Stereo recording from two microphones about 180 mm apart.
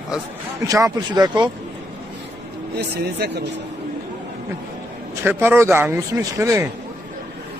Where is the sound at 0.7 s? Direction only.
20° right (ahead or behind).